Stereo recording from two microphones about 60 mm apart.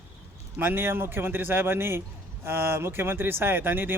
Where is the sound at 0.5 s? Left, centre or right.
Right.